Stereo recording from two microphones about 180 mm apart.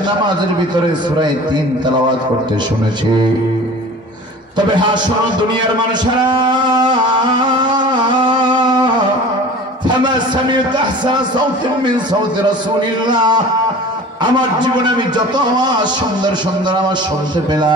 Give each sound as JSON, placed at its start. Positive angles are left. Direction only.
{"t": 6.2, "sound": "a man's voice", "side_deg": -25}
{"t": 7.6, "sound": "music", "side_deg": -25}
{"t": 9.8, "sound": "a man's voice", "side_deg": -25}
{"t": 15.1, "sound": "a man's voice", "side_deg": -25}